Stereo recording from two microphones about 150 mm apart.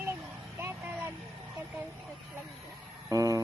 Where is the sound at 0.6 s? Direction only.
15° right (ahead or behind).